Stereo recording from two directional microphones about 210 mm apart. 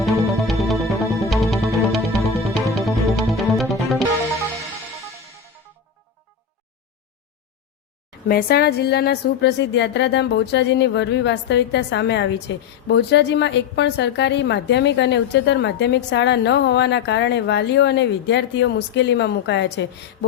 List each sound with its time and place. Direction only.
0.0 s music: centre (ahead or behind)
8.3 s a woman's voice: 45° left (ahead or behind)